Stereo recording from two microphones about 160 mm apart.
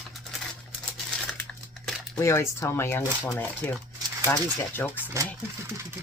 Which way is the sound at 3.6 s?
10° left (ahead or behind).